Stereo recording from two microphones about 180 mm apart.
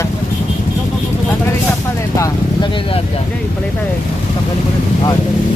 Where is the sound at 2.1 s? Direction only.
20° left (ahead or behind).